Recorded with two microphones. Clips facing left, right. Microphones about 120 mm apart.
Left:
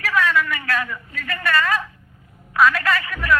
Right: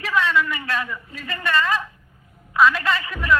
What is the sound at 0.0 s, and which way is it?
A man's voice, 25° right (ahead or behind).